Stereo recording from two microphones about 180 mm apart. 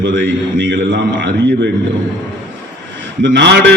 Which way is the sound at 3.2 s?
75° right (ahead or behind).